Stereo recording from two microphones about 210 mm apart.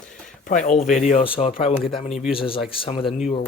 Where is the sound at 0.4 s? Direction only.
35° left (ahead or behind).